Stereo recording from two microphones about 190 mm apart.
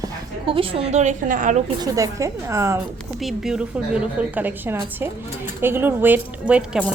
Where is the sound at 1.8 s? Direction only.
15° right (ahead or behind).